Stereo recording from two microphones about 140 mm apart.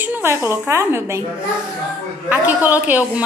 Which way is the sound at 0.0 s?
15° right (ahead or behind).